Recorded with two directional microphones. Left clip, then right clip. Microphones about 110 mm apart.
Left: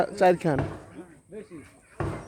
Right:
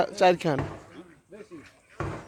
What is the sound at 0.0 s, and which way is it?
Speech, centre (ahead or behind).